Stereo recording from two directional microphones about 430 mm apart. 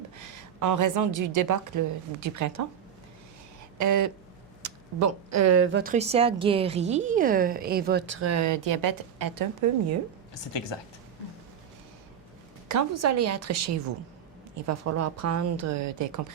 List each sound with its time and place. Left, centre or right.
0.2 s a woman's voice: right
3.8 s a woman's voice: right
10.7 s speech: left
12.6 s a woman's voice: right